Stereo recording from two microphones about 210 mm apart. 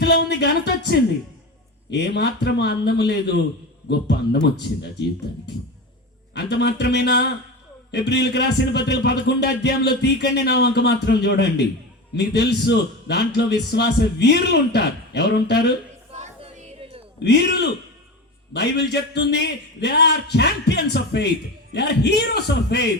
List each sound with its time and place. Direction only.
0.0 s a man's voice: 55° left (ahead or behind)
6.3 s a man's voice: 55° left (ahead or behind)
16.1 s a sound: 35° right (ahead or behind)
17.2 s a man's voice: 55° left (ahead or behind)